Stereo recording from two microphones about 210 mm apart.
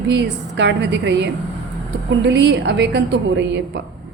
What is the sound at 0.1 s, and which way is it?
A woman's voice, 55° right (ahead or behind).